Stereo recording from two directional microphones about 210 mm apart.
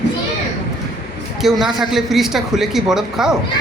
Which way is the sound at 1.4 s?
Centre (ahead or behind).